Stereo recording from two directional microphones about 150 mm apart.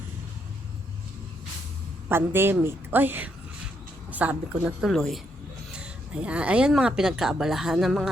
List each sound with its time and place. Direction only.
2.0 s a woman's voice: 15° right (ahead or behind)
4.9 s a woman's voice: centre (ahead or behind)